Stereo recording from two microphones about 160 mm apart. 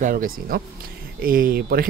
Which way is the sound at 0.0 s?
60° right (ahead or behind).